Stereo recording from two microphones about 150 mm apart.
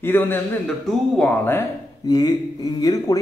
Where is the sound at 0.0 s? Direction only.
15° left (ahead or behind).